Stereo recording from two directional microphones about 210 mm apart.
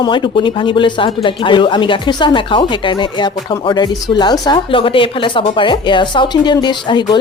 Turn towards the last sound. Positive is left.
turn(degrees=20)  # may be behind; listen again after turning